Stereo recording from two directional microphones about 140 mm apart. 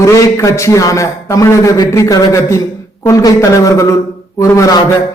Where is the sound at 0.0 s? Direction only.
25° left (ahead or behind).